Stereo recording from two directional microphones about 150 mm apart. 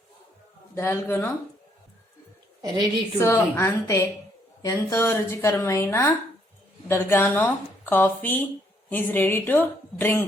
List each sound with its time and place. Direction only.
0.8 s a woman's voice: 15° left (ahead or behind)
3.2 s a woman's voice: 20° left (ahead or behind)